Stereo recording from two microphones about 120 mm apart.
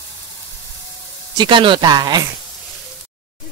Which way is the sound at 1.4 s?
45° right (ahead or behind).